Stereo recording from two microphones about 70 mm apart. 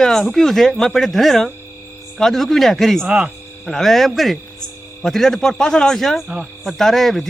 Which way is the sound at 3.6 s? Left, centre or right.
Centre.